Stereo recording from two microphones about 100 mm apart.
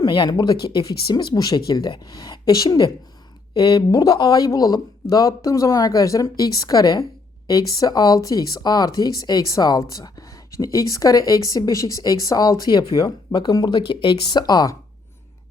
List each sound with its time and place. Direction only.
0.0 s speech: 45° left (ahead or behind)